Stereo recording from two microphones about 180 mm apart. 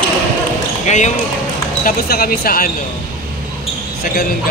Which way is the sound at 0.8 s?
40° left (ahead or behind).